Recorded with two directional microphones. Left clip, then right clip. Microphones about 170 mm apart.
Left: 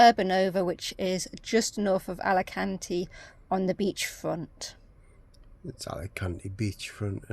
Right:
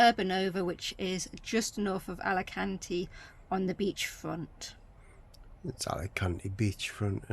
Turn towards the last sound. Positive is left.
turn(degrees=-5)  # may be behind; listen again after turning